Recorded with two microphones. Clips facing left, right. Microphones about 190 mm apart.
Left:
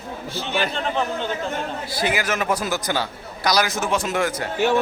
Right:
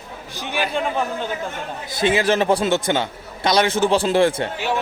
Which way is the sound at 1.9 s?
25° right (ahead or behind).